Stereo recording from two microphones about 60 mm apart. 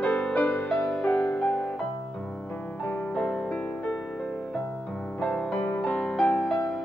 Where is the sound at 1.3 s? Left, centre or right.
Left.